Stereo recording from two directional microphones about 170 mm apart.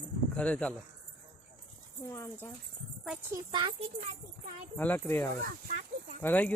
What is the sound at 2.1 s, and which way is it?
Speech, 15° left (ahead or behind).